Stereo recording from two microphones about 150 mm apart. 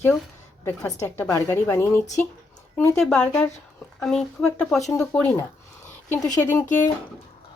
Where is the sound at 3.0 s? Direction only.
5° left (ahead or behind).